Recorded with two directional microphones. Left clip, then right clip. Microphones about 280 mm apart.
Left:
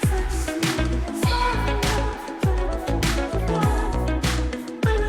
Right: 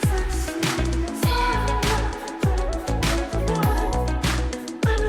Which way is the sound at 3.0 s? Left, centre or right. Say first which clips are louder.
Right 2 dB; centre.